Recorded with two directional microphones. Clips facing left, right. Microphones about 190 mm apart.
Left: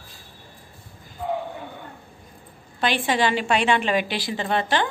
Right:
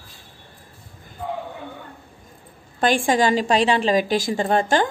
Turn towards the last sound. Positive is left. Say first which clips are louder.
# right 4 dB
turn(degrees=-45)  # may be behind; listen again after turning